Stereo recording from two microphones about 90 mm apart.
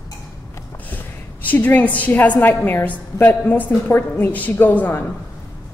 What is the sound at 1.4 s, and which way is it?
A woman's voice, 20° left (ahead or behind).